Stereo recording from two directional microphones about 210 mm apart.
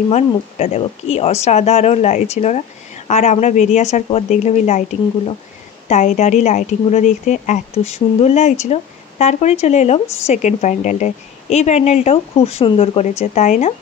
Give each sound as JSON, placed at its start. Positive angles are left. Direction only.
{"t": 0.1, "sound": "a woman's voice", "side_deg": 30}